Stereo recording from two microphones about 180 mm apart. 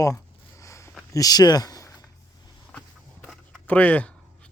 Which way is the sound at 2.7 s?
5° left (ahead or behind).